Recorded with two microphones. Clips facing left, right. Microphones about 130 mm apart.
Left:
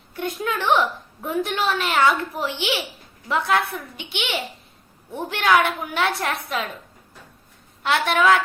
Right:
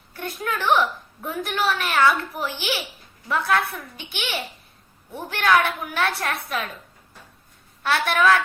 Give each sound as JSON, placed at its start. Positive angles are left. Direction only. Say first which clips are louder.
{"t": 0.1, "sound": "a woman's voice", "louder": "left 3 dB", "side_deg": 20}
{"t": 7.9, "sound": "a woman's voice", "louder": "left 1 dB", "side_deg": 20}